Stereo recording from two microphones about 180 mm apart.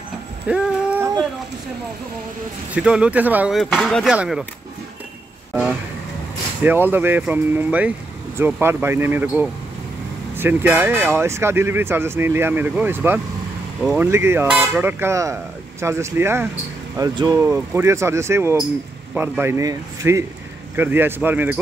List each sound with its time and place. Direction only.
0.5 s a sound: 10° right (ahead or behind)
2.7 s speech: 5° right (ahead or behind)
5.5 s vehicle: 5° right (ahead or behind)
6.6 s speech: 10° right (ahead or behind)
10.3 s speech: 10° right (ahead or behind)